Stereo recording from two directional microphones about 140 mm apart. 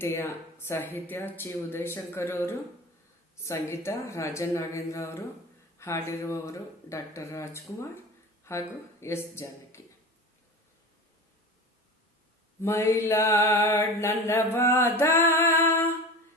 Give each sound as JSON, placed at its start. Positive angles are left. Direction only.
{"t": 0.0, "sound": "speech", "side_deg": 20}
{"t": 3.4, "sound": "mantra", "side_deg": 20}
{"t": 8.4, "sound": "speech", "side_deg": 20}
{"t": 12.6, "sound": "mantra", "side_deg": 20}